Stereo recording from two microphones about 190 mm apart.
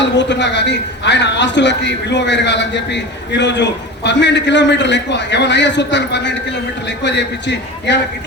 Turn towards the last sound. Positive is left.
turn(degrees=65)  # may be behind; listen again after turning